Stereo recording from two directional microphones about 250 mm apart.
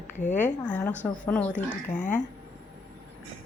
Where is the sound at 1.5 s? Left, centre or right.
Left.